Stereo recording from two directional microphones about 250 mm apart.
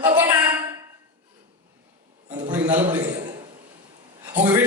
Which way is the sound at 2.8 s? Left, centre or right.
Right.